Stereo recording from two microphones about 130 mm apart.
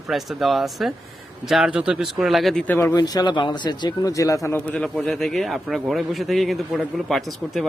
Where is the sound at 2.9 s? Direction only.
30° left (ahead or behind).